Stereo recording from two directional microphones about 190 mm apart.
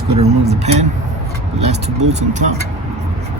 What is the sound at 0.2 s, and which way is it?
Speech, 35° right (ahead or behind).